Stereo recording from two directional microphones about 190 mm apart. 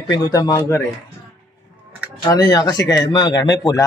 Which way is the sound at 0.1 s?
20° left (ahead or behind).